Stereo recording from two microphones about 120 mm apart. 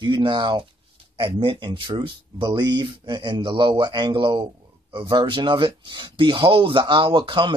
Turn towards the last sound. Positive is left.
turn(degrees=-40)  # may be behind; listen again after turning